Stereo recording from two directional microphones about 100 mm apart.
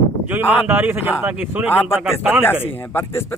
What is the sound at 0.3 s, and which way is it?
Speech, 20° right (ahead or behind).